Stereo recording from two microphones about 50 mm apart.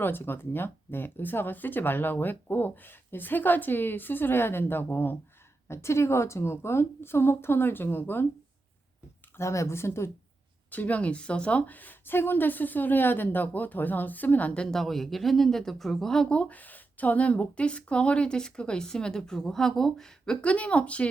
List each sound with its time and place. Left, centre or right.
0.0 s speech: left
5.6 s speech: left
9.4 s speech: left
10.7 s speech: left
14.6 s speech: centre
16.3 s a woman's voice: left
16.6 s a woman's voice: left